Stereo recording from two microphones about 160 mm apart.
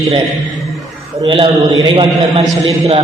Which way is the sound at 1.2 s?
35° right (ahead or behind).